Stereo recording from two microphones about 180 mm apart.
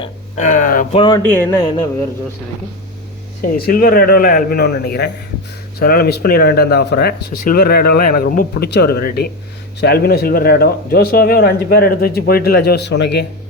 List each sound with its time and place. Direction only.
0.3 s speech: 45° left (ahead or behind)
0.9 s speech: 25° left (ahead or behind)
1.2 s speech: 10° left (ahead or behind)
1.5 s speech: 20° left (ahead or behind)
3.7 s speech: 55° left (ahead or behind); by 13.2 s 70° left (ahead or behind)